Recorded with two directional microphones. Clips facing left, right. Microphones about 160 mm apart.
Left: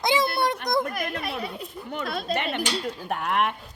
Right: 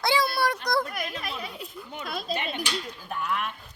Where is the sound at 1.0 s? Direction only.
60° left (ahead or behind).